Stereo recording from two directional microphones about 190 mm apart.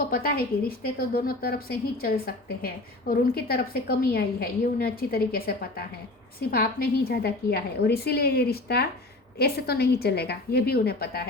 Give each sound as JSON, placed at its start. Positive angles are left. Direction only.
{"t": 0.1, "sound": "a woman's voice", "side_deg": 50}